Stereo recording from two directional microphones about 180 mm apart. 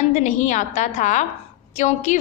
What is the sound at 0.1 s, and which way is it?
A woman's voice, 40° left (ahead or behind).